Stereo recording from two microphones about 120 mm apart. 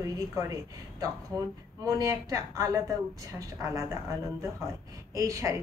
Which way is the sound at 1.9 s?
25° right (ahead or behind).